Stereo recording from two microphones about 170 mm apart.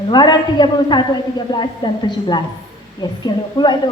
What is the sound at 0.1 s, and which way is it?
A woman's voice, 25° left (ahead or behind).